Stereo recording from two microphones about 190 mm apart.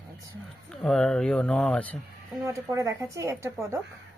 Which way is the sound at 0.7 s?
Centre (ahead or behind).